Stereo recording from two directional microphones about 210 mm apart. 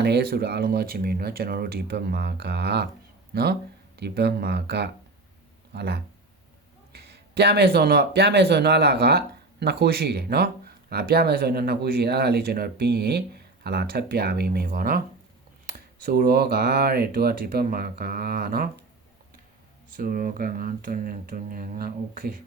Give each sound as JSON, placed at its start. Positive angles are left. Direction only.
{"t": 0.0, "sound": "speech", "side_deg": -50}
{"t": 20.0, "sound": "speech", "side_deg": -40}